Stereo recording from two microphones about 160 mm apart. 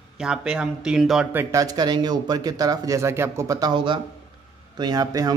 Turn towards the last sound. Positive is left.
turn(degrees=-25)  # may be behind; listen again after turning